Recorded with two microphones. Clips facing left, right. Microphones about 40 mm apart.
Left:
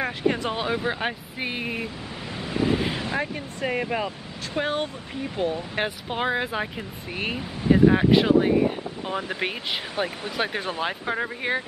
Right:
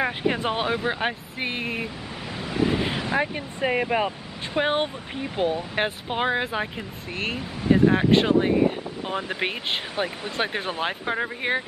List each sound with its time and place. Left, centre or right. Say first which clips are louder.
0.0 s speech: right 1 dB; centre
2.3 s a sound: even; centre
3.3 s speech: right 3 dB; centre
4.6 s speech: right 3 dB; right